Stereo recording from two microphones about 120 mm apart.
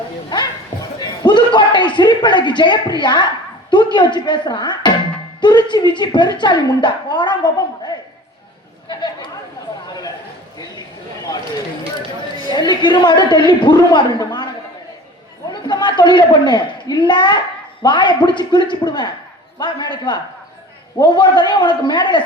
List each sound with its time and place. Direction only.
0.9 s a sound: 40° left (ahead or behind)
3.0 s a woman's voice: 40° left (ahead or behind)
8.9 s chatter: 40° left (ahead or behind)
12.5 s a woman's voice: 40° left (ahead or behind)
15.6 s a man's voice: 40° left (ahead or behind)